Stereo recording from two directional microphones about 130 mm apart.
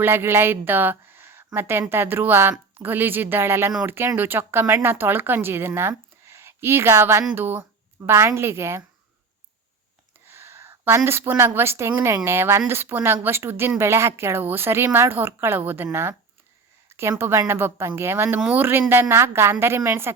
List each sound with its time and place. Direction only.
0.0 s a woman's voice: 15° right (ahead or behind)
10.2 s a woman's voice: 20° right (ahead or behind)